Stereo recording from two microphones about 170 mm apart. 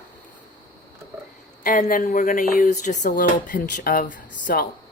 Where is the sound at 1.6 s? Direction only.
50° left (ahead or behind).